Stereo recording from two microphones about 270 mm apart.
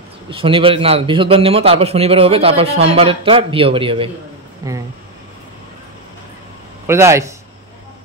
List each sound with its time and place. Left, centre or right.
0.3 s a man's voice: centre
6.9 s speech: centre